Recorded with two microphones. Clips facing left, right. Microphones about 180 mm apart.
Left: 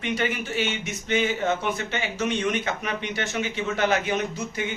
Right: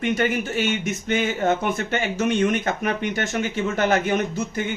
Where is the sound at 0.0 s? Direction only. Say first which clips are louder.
Right 5 dB; 45° right (ahead or behind).